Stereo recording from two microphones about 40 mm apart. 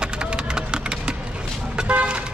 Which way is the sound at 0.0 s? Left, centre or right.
Right.